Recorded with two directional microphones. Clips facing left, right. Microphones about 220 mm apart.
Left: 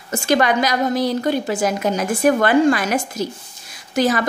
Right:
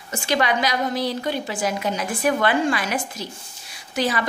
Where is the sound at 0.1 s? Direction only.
45° left (ahead or behind).